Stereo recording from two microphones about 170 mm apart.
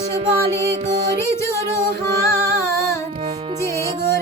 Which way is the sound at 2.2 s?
15° left (ahead or behind).